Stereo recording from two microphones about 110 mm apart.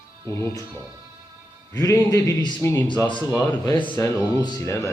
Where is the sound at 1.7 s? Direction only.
30° left (ahead or behind).